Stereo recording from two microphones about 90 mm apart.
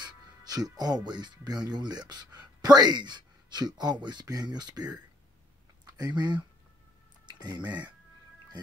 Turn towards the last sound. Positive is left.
turn(degrees=-55)  # may be behind; listen again after turning